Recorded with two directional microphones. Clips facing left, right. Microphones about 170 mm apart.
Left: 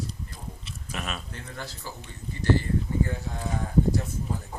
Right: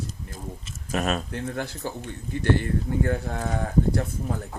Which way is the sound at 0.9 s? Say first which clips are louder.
Right 10 dB; 45° right (ahead or behind).